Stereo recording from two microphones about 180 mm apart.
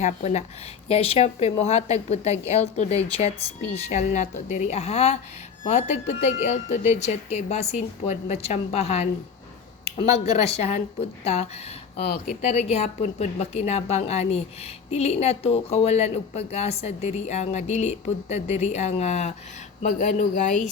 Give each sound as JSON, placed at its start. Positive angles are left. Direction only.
{"t": 0.0, "sound": "speech", "side_deg": 40}
{"t": 10.1, "sound": "speech", "side_deg": 35}
{"t": 12.0, "sound": "speech", "side_deg": 60}
{"t": 12.4, "sound": "speech", "side_deg": 35}